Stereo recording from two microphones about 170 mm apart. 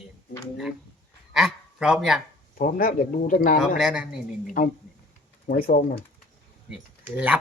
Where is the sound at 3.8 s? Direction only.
5° right (ahead or behind).